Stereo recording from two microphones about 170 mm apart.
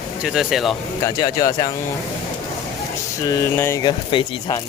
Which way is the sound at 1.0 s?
20° left (ahead or behind).